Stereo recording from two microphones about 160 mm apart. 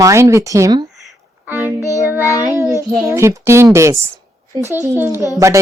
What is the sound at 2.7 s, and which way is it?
A child's voice, 20° right (ahead or behind).